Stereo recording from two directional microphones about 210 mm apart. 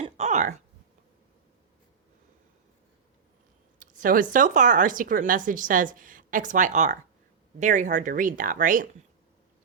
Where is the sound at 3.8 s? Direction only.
40° right (ahead or behind).